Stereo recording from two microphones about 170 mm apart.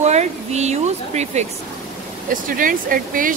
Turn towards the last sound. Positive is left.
turn(degrees=-55)  # may be behind; listen again after turning